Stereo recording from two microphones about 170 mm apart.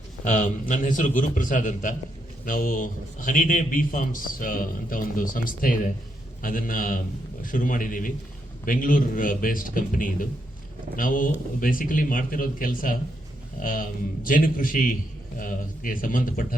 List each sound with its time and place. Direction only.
0.3 s a man's voice: 50° left (ahead or behind)